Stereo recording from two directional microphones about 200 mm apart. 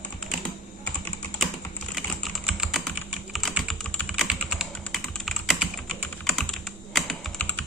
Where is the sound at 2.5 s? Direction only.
Centre (ahead or behind).